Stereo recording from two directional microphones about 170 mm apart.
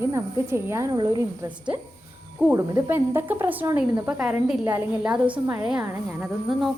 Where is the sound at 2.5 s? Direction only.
15° right (ahead or behind).